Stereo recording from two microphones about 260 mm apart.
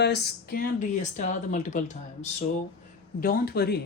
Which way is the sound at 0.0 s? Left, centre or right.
Left.